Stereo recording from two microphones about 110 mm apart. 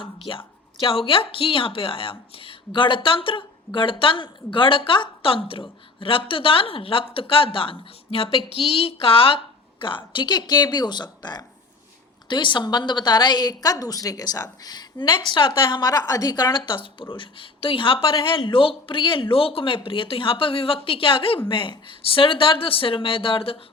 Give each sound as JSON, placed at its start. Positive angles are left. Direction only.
{"t": 0.0, "sound": "a woman's voice", "side_deg": 55}